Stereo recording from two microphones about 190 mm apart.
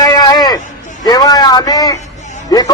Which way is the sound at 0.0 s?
20° left (ahead or behind).